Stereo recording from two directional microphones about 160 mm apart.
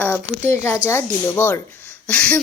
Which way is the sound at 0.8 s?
15° left (ahead or behind).